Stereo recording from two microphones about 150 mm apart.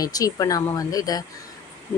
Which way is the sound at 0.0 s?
25° left (ahead or behind).